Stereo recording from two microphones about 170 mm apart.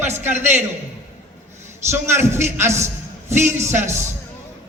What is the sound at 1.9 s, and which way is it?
A man's voice, 15° right (ahead or behind).